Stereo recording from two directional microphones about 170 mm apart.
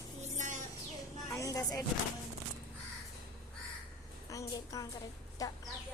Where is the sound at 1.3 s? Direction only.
20° left (ahead or behind).